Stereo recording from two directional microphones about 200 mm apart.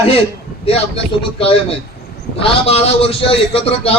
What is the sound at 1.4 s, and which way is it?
A man's voice, 30° left (ahead or behind).